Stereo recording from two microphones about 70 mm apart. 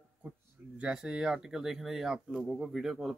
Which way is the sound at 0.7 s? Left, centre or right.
Centre.